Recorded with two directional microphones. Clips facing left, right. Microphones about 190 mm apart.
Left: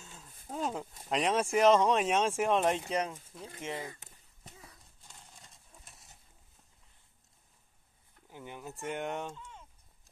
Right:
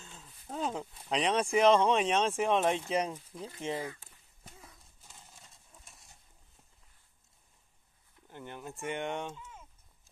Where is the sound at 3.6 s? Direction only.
30° right (ahead or behind).